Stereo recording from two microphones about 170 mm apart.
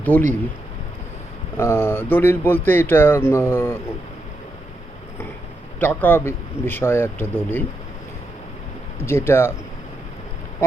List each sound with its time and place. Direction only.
0.1 s speech: 10° left (ahead or behind)
1.5 s speech: 15° left (ahead or behind)
5.8 s speech: 10° left (ahead or behind)
9.0 s speech: 15° left (ahead or behind)
10.6 s speech: 15° left (ahead or behind)